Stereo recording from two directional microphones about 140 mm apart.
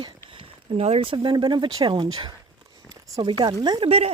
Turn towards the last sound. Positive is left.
turn(degrees=-30)  # may be behind; listen again after turning